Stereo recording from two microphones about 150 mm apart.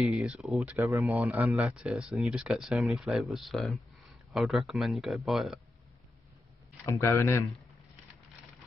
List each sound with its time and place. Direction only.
0.0 s speech: 5° right (ahead or behind)
0.9 s a man's voice: 20° right (ahead or behind); by 5.6 s centre (ahead or behind)
6.9 s speech: 20° left (ahead or behind)